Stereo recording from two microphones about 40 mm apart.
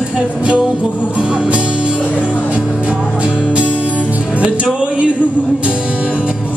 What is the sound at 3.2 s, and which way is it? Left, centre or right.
Music, right.